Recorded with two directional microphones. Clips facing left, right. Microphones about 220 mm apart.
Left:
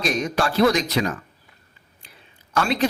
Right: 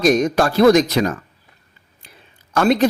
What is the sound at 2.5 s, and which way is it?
Speech, 45° right (ahead or behind).